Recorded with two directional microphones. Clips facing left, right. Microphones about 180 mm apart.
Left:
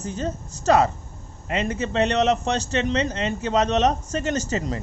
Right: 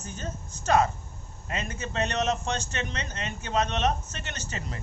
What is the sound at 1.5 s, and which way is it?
A man's voice, 30° left (ahead or behind).